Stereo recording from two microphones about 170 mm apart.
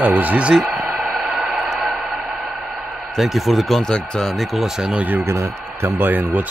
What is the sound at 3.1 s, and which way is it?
Speech, centre (ahead or behind).